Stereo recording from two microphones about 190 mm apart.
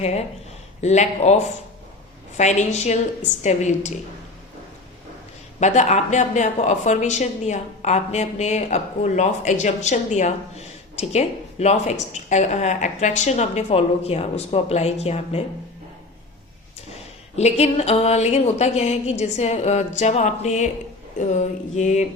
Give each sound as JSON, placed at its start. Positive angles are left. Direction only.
{"t": 0.0, "sound": "speech", "side_deg": 35}
{"t": 5.5, "sound": "speech", "side_deg": 35}
{"t": 17.3, "sound": "speech", "side_deg": 35}